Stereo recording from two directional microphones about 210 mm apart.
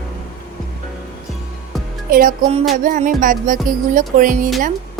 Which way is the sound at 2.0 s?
40° right (ahead or behind).